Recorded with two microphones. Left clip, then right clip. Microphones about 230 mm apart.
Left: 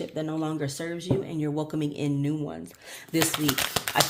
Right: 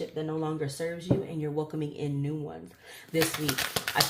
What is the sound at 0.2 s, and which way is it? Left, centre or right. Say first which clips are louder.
Speech: left 2 dB; left.